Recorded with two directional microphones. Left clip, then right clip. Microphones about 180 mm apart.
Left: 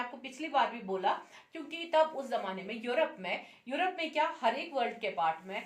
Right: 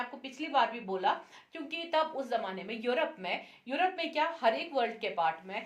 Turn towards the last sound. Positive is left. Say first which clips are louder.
# right 1 dB
turn(degrees=-35)  # may be behind; listen again after turning